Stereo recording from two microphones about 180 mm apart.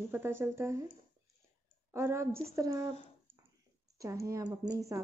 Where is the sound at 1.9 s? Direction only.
15° right (ahead or behind).